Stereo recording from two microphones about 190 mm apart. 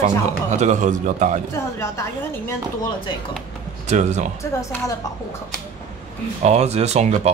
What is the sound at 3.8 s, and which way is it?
Speech, 40° right (ahead or behind).